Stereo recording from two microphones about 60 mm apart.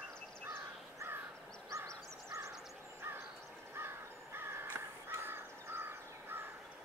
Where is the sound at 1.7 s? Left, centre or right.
Right.